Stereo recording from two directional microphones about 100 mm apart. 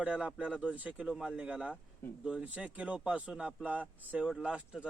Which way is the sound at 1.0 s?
5° right (ahead or behind).